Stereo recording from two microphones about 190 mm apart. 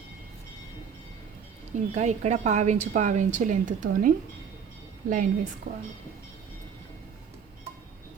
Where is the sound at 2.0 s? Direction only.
35° right (ahead or behind).